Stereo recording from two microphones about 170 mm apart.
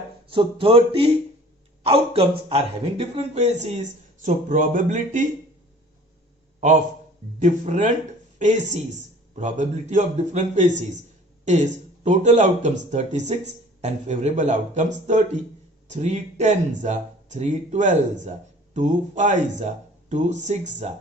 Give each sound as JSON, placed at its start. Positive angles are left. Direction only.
{"t": 0.3, "sound": "speech", "side_deg": -30}
{"t": 7.3, "sound": "speech", "side_deg": -45}